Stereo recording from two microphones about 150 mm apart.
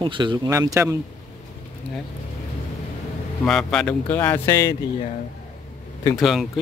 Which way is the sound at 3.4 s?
5° left (ahead or behind).